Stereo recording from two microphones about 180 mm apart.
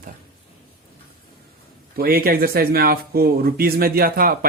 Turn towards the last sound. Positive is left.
turn(degrees=-55)  # may be behind; listen again after turning